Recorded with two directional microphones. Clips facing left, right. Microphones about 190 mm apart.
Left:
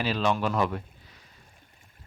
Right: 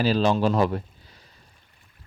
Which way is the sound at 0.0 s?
35° right (ahead or behind).